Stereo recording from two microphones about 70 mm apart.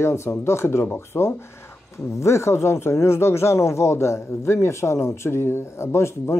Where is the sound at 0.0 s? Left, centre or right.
Left.